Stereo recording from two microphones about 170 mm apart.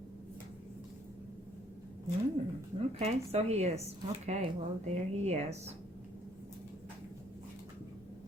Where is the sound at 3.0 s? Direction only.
40° right (ahead or behind).